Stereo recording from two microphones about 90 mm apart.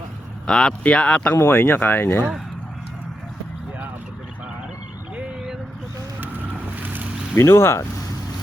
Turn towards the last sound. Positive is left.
turn(degrees=30)  # may be behind; listen again after turning